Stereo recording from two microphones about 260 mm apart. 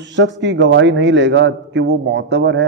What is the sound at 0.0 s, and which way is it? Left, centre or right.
A man's voice, right.